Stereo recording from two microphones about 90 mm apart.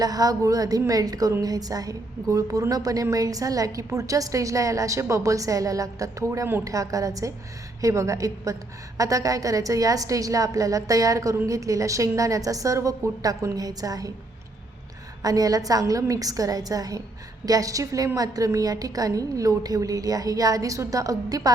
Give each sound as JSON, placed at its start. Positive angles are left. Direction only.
{"t": 0.0, "sound": "a woman's voice", "side_deg": -45}
{"t": 15.2, "sound": "a woman's voice", "side_deg": -40}